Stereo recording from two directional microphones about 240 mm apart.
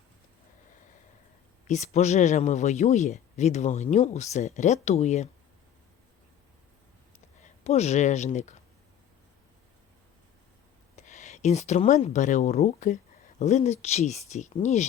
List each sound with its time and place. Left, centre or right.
1.6 s speech: left
7.4 s speech: left
10.9 s speech: left